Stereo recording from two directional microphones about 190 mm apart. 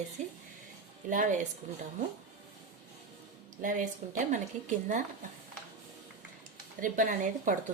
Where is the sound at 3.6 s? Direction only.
40° right (ahead or behind).